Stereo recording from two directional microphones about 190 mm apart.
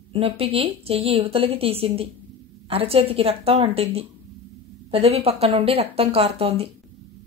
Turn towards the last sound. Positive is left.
turn(degrees=-30)  # may be behind; listen again after turning